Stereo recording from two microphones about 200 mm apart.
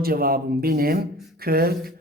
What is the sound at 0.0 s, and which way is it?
Speech, 45° right (ahead or behind).